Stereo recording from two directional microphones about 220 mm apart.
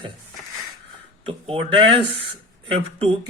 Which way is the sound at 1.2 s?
25° right (ahead or behind).